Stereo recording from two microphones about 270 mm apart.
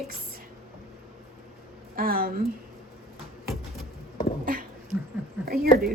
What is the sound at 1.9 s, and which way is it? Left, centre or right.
Speech, right.